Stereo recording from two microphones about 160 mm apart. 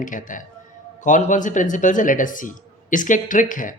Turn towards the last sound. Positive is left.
turn(degrees=55)  # may be behind; listen again after turning